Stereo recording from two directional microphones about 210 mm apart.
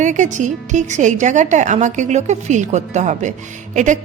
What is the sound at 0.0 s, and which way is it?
A woman's voice, 35° right (ahead or behind).